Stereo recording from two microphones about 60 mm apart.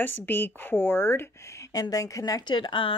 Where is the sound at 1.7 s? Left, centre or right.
Left.